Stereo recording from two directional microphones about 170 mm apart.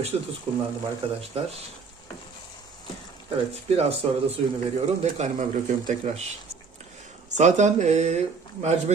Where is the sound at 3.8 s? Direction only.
35° right (ahead or behind).